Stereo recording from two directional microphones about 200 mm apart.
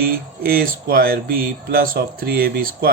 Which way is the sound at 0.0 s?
45° right (ahead or behind).